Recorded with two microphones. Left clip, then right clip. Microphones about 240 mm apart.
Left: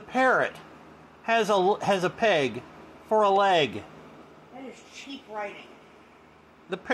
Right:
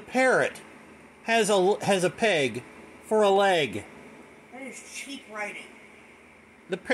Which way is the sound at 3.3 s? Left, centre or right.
Centre.